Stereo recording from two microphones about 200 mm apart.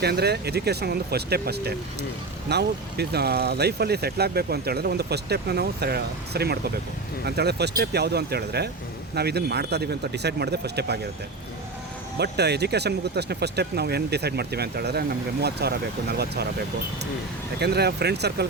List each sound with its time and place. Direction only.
0.0 s speech: 55° right (ahead or behind)
12.2 s speech: 55° right (ahead or behind)
17.6 s speech: 55° right (ahead or behind)